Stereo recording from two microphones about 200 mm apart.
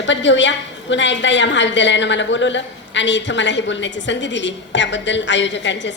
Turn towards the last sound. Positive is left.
turn(degrees=65)  # may be behind; listen again after turning